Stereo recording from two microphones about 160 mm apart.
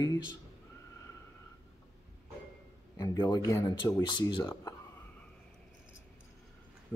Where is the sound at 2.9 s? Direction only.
25° left (ahead or behind).